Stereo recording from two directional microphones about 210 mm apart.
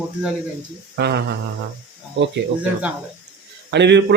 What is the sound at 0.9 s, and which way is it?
Speech, 50° right (ahead or behind).